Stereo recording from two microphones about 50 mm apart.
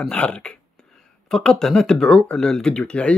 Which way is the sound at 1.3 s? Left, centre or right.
Centre.